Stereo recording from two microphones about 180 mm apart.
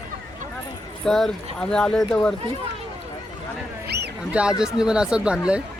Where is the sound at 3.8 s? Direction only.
65° right (ahead or behind).